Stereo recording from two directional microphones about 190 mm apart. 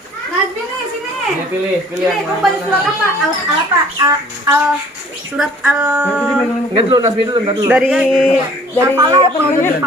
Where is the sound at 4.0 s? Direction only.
15° right (ahead or behind).